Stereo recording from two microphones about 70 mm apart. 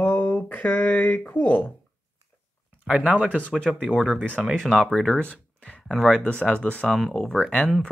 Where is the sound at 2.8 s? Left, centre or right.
Centre.